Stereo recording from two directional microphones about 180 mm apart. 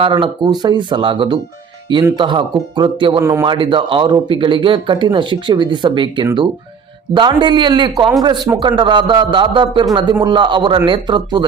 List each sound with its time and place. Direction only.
0.0 s speech: 25° right (ahead or behind)
3.4 s speech: 25° right (ahead or behind)